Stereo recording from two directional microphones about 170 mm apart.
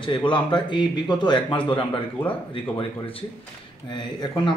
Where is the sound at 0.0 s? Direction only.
30° left (ahead or behind).